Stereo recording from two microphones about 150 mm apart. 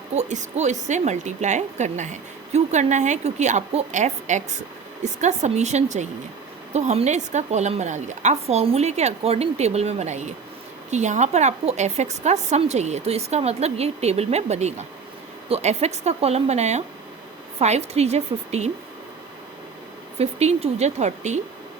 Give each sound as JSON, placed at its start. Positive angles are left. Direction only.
{"t": 0.1, "sound": "a woman's voice", "side_deg": -50}
{"t": 20.1, "sound": "a woman's voice", "side_deg": -45}